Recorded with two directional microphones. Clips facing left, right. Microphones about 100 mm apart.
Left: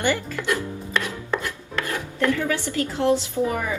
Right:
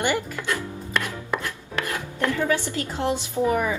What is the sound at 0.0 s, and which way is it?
Speech, 15° right (ahead or behind).